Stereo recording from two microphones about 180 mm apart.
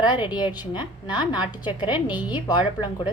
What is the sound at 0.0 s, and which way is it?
A woman's voice, 25° left (ahead or behind).